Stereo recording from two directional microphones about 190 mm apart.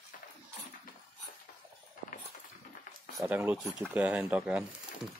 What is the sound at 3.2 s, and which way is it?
Speech, 10° right (ahead or behind).